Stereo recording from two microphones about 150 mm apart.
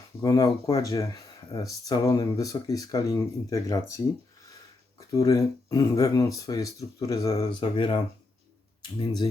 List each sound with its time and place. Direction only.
0.2 s speech: 25° left (ahead or behind)
7.8 s speech: 35° left (ahead or behind)